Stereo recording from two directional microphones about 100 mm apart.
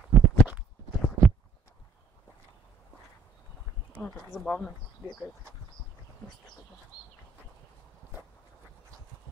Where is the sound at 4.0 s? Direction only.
5° left (ahead or behind).